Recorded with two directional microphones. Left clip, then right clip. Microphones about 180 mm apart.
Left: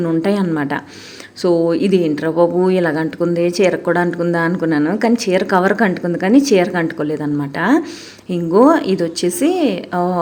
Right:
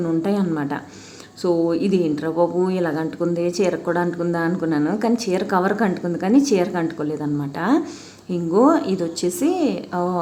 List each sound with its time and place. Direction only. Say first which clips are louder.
0.0 s speech: left 5 dB; 20° left (ahead or behind)